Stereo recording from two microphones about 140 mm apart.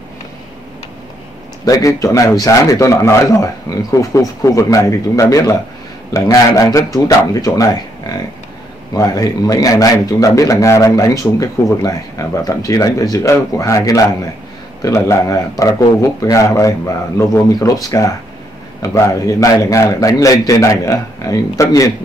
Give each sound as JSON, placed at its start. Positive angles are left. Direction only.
{"t": 1.6, "sound": "speech", "side_deg": 25}